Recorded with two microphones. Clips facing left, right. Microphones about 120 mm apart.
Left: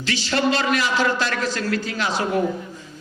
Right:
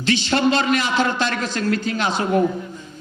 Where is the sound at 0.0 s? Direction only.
20° right (ahead or behind).